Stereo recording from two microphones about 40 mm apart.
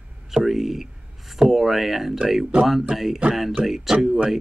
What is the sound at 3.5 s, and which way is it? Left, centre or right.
Speech, centre.